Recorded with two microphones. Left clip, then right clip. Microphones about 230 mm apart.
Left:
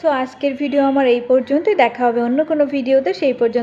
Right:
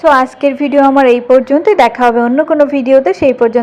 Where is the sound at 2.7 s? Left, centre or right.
Right.